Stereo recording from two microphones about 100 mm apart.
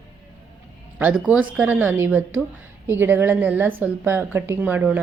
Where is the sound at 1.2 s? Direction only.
10° right (ahead or behind).